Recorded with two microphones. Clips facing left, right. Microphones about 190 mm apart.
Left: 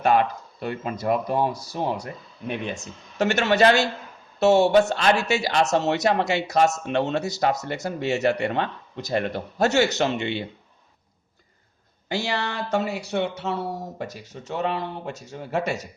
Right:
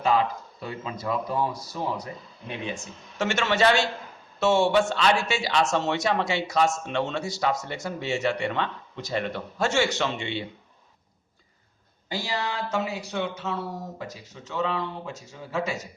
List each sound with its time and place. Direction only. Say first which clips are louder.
0.0 s speech: left 3 dB; 65° left (ahead or behind)
2.6 s a man's voice: left 2 dB; 40° left (ahead or behind)
12.0 s speech: left 3 dB; 70° left (ahead or behind)